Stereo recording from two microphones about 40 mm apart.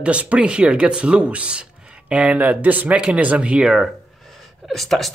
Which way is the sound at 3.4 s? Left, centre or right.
Right.